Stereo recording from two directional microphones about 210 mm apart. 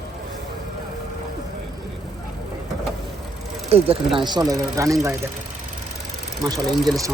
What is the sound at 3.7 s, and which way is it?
Speech, 30° right (ahead or behind).